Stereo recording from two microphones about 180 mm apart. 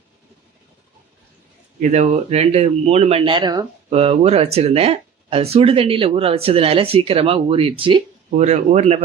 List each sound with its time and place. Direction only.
1.8 s speech: 35° right (ahead or behind)
3.8 s speech: 35° right (ahead or behind)